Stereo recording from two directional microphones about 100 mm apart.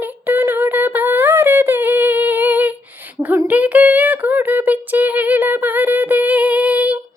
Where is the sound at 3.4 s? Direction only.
15° right (ahead or behind).